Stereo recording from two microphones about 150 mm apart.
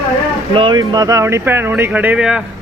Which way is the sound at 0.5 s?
35° right (ahead or behind).